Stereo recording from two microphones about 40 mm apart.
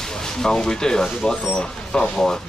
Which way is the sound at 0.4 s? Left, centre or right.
Centre.